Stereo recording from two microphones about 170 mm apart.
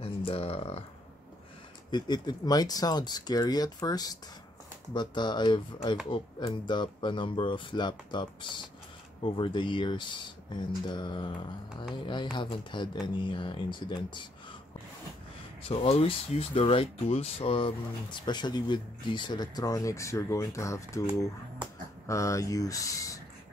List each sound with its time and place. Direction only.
0.0 s speech: 35° left (ahead or behind)
1.9 s speech: 25° left (ahead or behind)
15.7 s speech: 35° left (ahead or behind); by 21.0 s 20° left (ahead or behind)
22.0 s speech: 20° left (ahead or behind)